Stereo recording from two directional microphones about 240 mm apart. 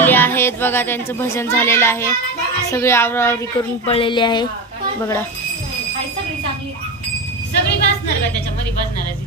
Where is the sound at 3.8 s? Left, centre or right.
Left.